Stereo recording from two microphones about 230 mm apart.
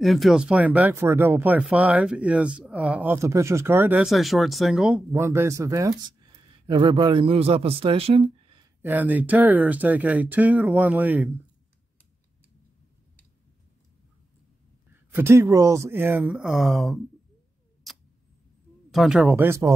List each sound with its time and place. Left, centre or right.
0.0 s speech: centre
5.1 s speech: centre
8.8 s speech: centre
14.9 s speech: centre
17.9 s tick-tock: centre
18.9 s speech: centre